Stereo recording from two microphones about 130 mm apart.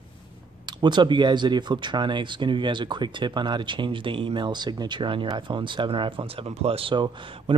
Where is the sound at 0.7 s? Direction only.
35° right (ahead or behind).